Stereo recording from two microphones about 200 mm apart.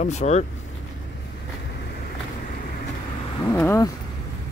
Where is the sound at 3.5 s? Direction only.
15° left (ahead or behind).